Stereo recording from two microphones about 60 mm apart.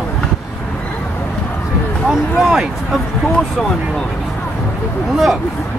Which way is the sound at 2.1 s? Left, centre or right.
Centre.